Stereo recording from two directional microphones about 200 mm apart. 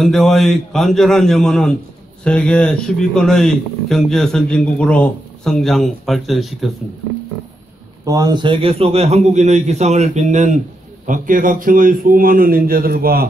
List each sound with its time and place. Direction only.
0.0 s speech: centre (ahead or behind)
8.0 s a man's voice: 15° right (ahead or behind); by 13.3 s 50° right (ahead or behind)